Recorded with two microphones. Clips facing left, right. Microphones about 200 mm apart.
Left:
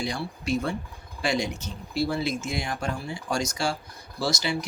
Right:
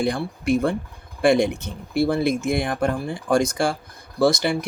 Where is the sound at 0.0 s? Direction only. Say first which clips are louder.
Right 7 dB; 55° right (ahead or behind).